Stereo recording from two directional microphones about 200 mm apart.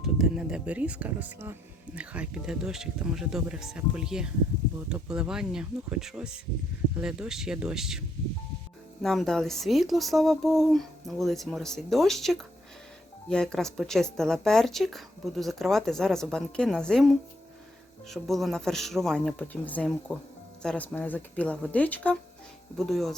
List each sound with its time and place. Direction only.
0.0 s speech: 5° right (ahead or behind)
9.0 s speech: centre (ahead or behind)